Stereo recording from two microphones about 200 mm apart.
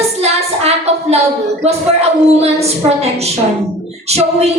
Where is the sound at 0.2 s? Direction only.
30° right (ahead or behind).